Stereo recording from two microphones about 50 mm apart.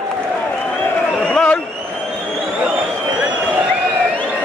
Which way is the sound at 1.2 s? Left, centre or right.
Centre.